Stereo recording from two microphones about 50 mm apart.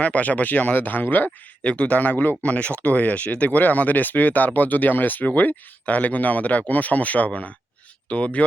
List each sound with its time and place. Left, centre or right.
0.0 s speech: left
1.6 s speech: left